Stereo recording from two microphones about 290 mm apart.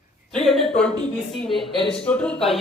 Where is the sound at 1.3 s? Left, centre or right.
Centre.